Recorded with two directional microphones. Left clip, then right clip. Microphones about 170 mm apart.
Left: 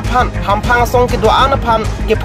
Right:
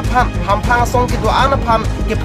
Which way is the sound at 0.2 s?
20° left (ahead or behind).